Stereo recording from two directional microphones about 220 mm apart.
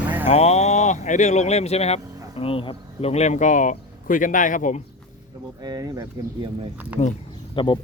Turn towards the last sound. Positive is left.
turn(degrees=20)  # may be behind; listen again after turning